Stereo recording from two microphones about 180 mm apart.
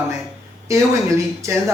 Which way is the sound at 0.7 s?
15° right (ahead or behind).